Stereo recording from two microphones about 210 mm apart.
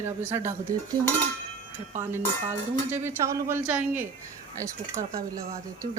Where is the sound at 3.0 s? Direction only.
15° right (ahead or behind).